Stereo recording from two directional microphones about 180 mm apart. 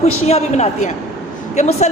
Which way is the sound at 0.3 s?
35° left (ahead or behind).